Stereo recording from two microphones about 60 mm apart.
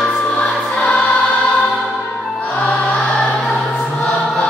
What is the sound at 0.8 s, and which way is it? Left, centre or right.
Choir, centre.